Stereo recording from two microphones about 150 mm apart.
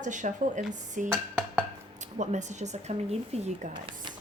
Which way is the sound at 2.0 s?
50° right (ahead or behind).